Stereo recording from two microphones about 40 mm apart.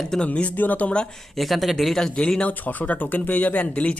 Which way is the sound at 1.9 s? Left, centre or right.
Centre.